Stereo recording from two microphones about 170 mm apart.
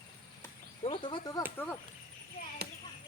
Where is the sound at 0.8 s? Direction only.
30° left (ahead or behind).